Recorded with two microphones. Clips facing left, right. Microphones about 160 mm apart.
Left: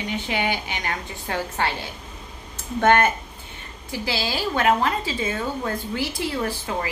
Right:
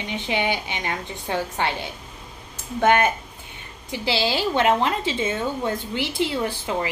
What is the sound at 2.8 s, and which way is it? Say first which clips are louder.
A woman's voice: even; 15° right (ahead or behind).